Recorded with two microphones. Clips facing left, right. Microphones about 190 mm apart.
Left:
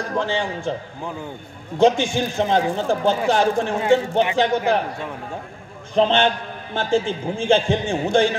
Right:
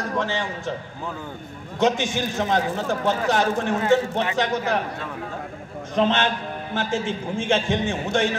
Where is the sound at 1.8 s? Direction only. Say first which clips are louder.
Left 5 dB; 30° left (ahead or behind).